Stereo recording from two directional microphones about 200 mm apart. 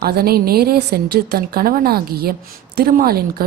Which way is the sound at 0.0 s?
50° right (ahead or behind).